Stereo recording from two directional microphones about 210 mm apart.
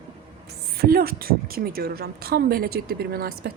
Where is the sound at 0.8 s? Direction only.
45° right (ahead or behind).